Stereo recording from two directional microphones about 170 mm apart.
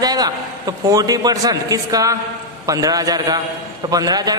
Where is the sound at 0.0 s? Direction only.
25° right (ahead or behind).